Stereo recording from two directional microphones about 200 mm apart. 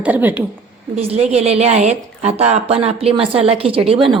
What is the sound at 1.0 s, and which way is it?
A woman's voice, 30° right (ahead or behind).